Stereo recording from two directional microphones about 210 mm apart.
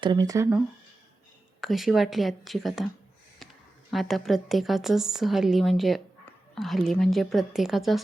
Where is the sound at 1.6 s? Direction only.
Centre (ahead or behind).